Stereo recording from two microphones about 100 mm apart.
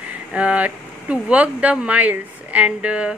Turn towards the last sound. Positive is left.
turn(degrees=-10)  # may be behind; listen again after turning